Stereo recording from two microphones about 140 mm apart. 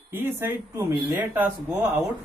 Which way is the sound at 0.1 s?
15° right (ahead or behind).